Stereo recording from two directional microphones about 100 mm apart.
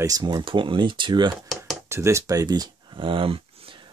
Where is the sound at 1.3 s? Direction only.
Centre (ahead or behind).